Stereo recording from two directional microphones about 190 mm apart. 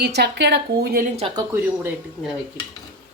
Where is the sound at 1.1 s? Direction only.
30° right (ahead or behind).